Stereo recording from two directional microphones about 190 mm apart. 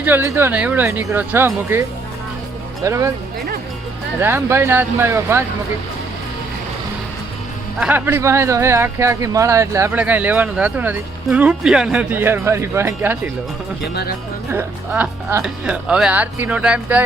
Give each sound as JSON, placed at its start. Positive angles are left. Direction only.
{"t": 0.0, "sound": "speech", "side_deg": -10}
{"t": 2.8, "sound": "speech", "side_deg": -15}
{"t": 4.2, "sound": "speech", "side_deg": -10}
{"t": 7.8, "sound": "speech", "side_deg": -10}
{"t": 14.5, "sound": "speech", "side_deg": -10}